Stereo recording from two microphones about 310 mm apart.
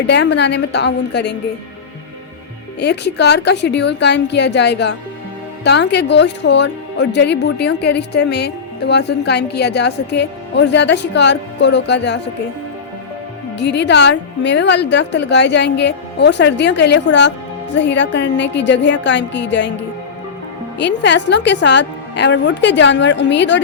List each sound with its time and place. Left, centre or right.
0.1 s speech: left
2.8 s speech: left
13.6 s speech: left
20.7 s speech: left